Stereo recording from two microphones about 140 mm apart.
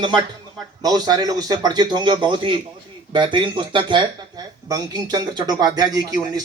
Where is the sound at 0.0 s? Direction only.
30° right (ahead or behind).